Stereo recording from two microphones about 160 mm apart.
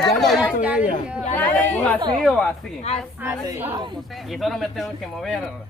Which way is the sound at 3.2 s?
20° right (ahead or behind).